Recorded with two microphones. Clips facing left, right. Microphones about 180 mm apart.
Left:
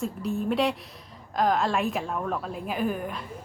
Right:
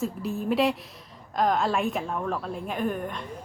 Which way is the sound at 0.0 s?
Centre (ahead or behind).